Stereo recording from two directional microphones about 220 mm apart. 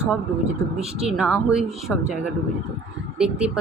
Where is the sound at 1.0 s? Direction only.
5° right (ahead or behind).